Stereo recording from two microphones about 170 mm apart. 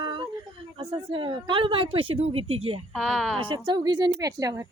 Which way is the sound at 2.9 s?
Centre (ahead or behind).